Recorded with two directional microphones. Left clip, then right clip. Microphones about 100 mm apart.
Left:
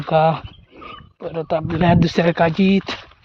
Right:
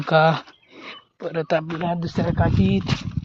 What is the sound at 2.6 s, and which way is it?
Speech, 65° left (ahead or behind).